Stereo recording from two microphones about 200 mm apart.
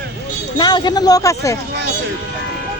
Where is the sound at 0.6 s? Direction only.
20° left (ahead or behind).